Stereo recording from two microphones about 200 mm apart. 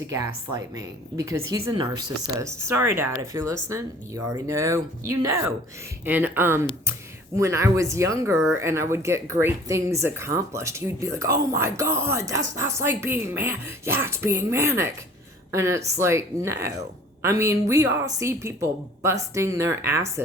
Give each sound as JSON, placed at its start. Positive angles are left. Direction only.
{"t": 0.1, "sound": "speech", "side_deg": -15}